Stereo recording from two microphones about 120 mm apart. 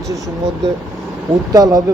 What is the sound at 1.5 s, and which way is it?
Speech, 30° right (ahead or behind).